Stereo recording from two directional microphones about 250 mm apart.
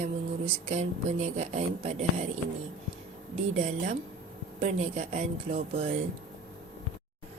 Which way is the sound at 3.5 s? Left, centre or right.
Right.